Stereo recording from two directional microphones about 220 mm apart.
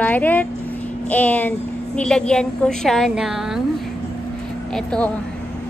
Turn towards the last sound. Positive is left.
turn(degrees=5)  # may be behind; listen again after turning